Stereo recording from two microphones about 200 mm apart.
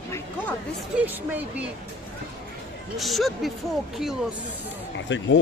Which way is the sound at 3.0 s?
Centre (ahead or behind).